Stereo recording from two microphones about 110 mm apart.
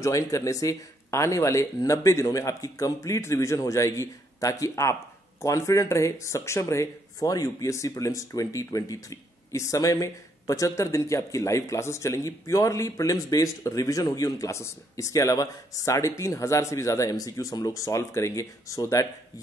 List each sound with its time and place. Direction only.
0.0 s speech: 30° left (ahead or behind)